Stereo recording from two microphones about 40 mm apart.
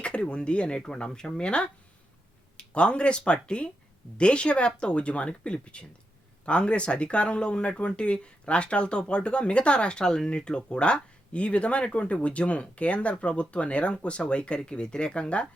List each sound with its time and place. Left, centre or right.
0.0 s speech: left